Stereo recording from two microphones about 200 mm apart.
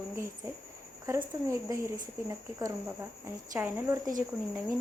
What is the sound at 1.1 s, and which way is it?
Speech, 15° right (ahead or behind).